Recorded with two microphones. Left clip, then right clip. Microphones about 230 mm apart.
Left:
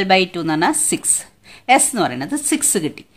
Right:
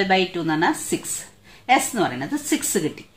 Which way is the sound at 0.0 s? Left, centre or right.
Left.